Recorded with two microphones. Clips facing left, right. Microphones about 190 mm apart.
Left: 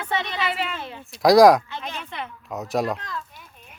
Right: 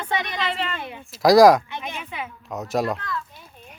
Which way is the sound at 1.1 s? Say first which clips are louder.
Even; centre (ahead or behind).